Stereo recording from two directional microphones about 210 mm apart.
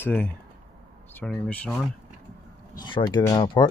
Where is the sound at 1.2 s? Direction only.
5° left (ahead or behind).